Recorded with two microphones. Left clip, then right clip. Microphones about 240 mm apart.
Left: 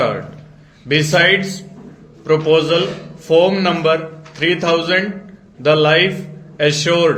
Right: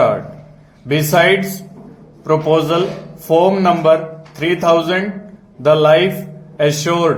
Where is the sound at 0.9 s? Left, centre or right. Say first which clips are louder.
Right 1 dB; right.